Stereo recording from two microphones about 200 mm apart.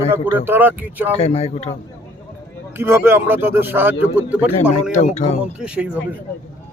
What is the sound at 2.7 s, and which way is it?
Speech, 10° right (ahead or behind).